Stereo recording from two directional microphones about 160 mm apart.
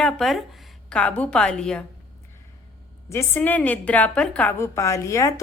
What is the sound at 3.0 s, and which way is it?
A woman's voice, 15° left (ahead or behind).